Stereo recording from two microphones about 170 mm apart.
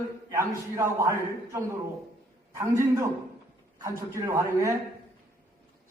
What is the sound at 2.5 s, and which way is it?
A man's voice, 15° right (ahead or behind).